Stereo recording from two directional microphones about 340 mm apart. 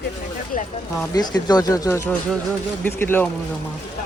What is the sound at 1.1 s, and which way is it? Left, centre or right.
Speech, centre.